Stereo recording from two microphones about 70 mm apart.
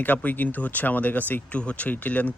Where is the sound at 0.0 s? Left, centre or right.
Left.